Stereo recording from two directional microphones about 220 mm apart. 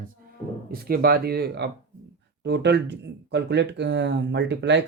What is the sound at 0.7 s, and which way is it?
Speech, 45° right (ahead or behind).